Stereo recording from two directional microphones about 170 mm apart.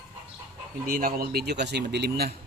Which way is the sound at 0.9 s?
55° right (ahead or behind).